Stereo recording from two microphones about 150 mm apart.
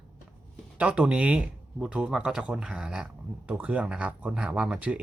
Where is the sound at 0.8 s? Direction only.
5° right (ahead or behind).